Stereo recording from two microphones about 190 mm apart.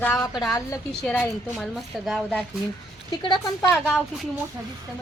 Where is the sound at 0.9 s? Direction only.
5° left (ahead or behind).